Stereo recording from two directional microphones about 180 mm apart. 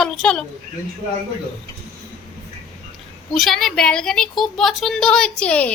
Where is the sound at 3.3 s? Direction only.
Centre (ahead or behind).